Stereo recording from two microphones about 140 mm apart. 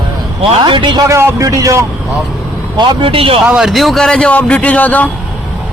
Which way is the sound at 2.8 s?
40° right (ahead or behind).